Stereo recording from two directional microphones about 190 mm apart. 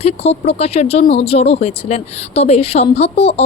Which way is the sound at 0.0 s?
35° left (ahead or behind).